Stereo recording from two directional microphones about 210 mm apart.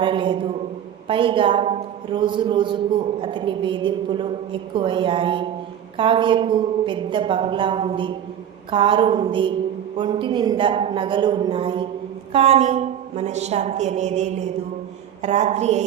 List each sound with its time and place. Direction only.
0.0 s a man's voice: 25° right (ahead or behind)